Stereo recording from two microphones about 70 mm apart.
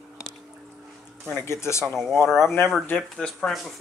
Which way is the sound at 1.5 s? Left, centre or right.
Left.